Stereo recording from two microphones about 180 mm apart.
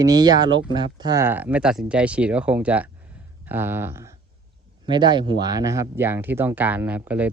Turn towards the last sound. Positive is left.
turn(degrees=-10)  # may be behind; listen again after turning